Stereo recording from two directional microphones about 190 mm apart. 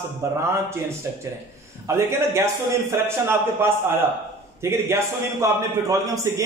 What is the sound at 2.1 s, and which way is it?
Speech, 15° right (ahead or behind).